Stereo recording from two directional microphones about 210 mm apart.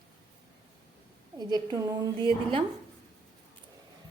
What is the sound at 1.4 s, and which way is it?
A woman's voice, 20° right (ahead or behind).